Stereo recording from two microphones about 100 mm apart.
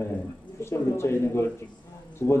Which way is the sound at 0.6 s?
25° left (ahead or behind).